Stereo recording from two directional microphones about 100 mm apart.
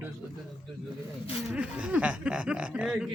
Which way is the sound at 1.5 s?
10° right (ahead or behind).